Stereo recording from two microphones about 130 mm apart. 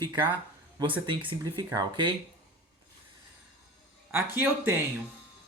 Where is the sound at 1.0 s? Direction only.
40° right (ahead or behind).